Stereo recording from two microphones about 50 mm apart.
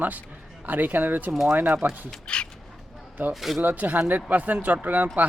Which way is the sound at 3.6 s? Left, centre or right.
Right.